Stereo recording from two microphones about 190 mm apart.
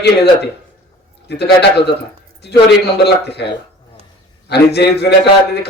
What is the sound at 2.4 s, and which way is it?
A man's voice, 60° left (ahead or behind).